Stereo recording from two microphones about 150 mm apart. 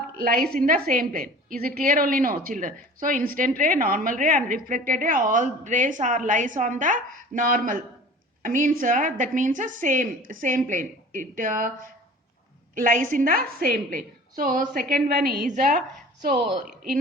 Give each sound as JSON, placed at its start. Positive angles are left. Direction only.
{"t": 0.3, "sound": "a woman's voice", "side_deg": -80}
{"t": 12.7, "sound": "a woman's voice", "side_deg": -65}